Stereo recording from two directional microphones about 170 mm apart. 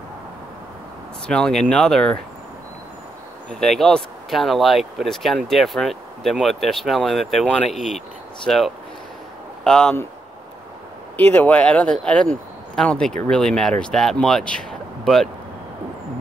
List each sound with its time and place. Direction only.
1.2 s speech: 5° left (ahead or behind)
3.5 s speech: centre (ahead or behind)
11.1 s speech: 10° left (ahead or behind)